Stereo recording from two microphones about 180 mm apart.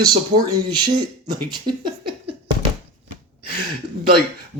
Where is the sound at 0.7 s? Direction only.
25° right (ahead or behind).